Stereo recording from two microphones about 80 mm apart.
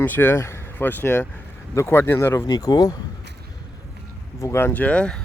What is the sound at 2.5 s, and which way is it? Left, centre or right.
Speech, left.